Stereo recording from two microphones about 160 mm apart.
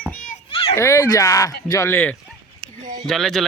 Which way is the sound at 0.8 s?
20° left (ahead or behind).